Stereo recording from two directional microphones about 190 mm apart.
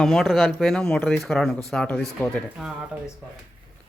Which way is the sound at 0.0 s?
Centre (ahead or behind).